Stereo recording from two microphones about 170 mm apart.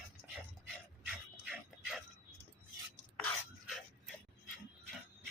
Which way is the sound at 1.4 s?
Centre (ahead or behind).